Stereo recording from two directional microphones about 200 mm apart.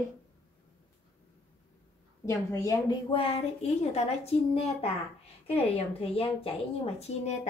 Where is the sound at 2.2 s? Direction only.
15° left (ahead or behind).